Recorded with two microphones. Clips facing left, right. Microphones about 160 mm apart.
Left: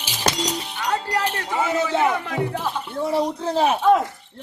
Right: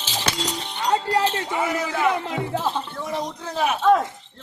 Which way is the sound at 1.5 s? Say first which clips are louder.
Left 3 dB; 25° left (ahead or behind).